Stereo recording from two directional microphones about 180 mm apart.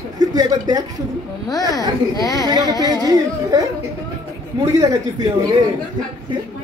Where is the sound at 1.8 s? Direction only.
20° left (ahead or behind).